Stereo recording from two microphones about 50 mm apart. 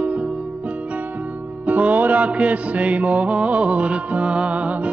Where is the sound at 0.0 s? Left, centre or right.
Right.